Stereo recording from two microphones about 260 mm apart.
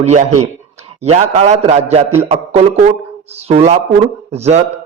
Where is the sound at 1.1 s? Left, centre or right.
Right.